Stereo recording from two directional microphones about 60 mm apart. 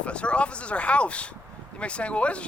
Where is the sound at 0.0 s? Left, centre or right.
Centre.